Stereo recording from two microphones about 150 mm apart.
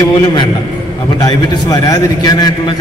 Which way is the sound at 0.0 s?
30° left (ahead or behind).